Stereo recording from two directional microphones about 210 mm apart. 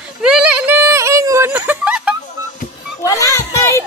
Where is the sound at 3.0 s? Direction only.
15° left (ahead or behind).